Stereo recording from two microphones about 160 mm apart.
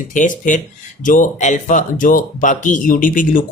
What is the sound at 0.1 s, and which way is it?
Speech, 55° left (ahead or behind).